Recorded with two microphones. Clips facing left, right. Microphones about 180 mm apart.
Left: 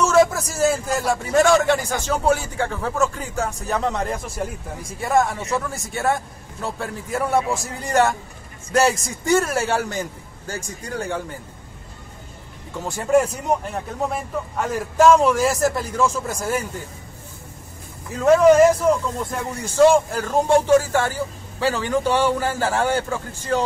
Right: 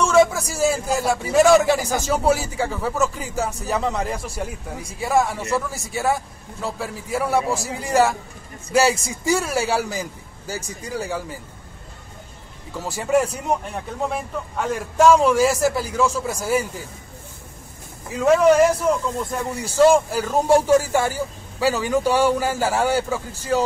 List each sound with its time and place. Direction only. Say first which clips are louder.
0.0 s a man's voice: even; centre (ahead or behind)
12.7 s a man's voice: left 2 dB; 5° right (ahead or behind)
18.2 s a man's voice: left 2 dB; centre (ahead or behind)